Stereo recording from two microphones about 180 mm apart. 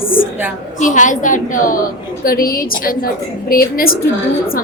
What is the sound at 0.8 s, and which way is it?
A woman's voice, 45° left (ahead or behind).